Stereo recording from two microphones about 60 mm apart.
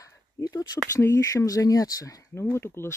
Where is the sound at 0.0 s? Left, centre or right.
Left.